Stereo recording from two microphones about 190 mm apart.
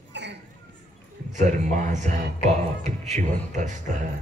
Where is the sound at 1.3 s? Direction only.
40° right (ahead or behind).